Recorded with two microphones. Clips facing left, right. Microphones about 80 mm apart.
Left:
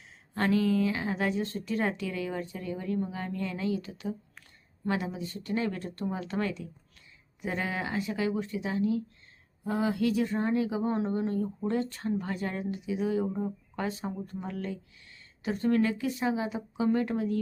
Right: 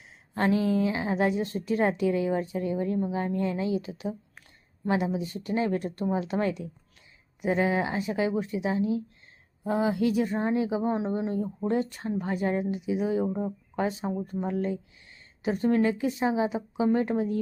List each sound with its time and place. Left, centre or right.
0.3 s speech: right